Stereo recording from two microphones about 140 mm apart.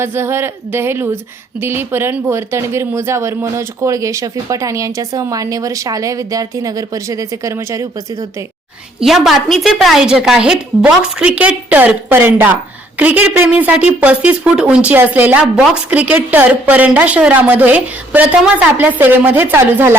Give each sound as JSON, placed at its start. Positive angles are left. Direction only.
{"t": 0.0, "sound": "a woman's voice", "side_deg": -15}
{"t": 9.0, "sound": "a woman's voice", "side_deg": 0}